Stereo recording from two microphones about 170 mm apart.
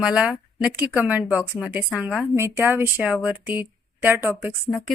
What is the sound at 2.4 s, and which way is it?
Speech, 15° right (ahead or behind).